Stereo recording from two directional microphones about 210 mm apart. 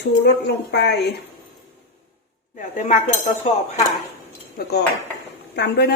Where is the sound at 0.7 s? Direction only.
55° left (ahead or behind).